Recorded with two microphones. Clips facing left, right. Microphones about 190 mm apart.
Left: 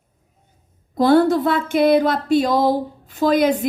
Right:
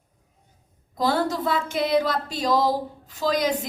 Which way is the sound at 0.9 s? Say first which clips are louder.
Left 9 dB; 60° left (ahead or behind).